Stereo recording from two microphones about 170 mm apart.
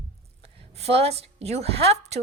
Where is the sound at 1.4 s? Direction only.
40° right (ahead or behind).